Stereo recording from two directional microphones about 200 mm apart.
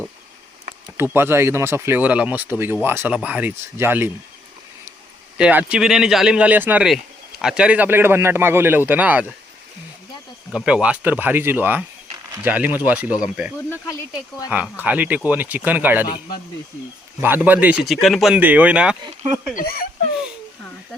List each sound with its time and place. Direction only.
0.9 s speech: 10° right (ahead or behind)
5.4 s speech: 5° right (ahead or behind)
10.5 s speech: 5° right (ahead or behind)
14.5 s speech: 10° right (ahead or behind)
17.2 s speech: 10° right (ahead or behind)
19.5 s speech: 50° left (ahead or behind)